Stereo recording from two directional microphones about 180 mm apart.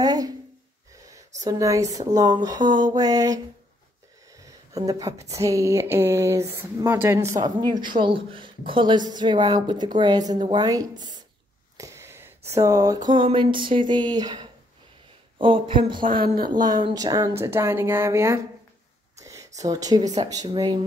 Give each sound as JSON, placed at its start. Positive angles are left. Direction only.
{"t": 0.0, "sound": "a sound", "side_deg": -20}
{"t": 1.4, "sound": "a woman's voice", "side_deg": -20}
{"t": 4.4, "sound": "a woman's voice", "side_deg": -20}
{"t": 16.0, "sound": "a woman's voice", "side_deg": -55}
{"t": 16.4, "sound": "a woman's voice", "side_deg": -25}
{"t": 19.1, "sound": "a sound", "side_deg": -20}
{"t": 20.2, "sound": "a woman's voice", "side_deg": -20}